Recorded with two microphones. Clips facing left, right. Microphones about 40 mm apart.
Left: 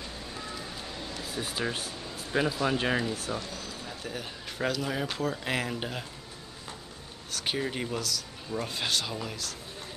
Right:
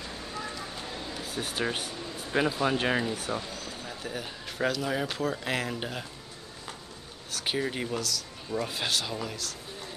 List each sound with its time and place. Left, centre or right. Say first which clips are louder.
1.1 s air conditioning: even; centre
2.3 s speech: right 1 dB; centre
4.0 s speech: right 2 dB; centre
7.2 s speech: right 1 dB; centre